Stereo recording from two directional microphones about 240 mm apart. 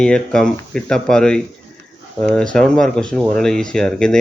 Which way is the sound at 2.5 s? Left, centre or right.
Centre.